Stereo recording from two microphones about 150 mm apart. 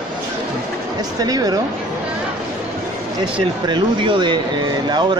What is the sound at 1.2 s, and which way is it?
Speech, 25° right (ahead or behind).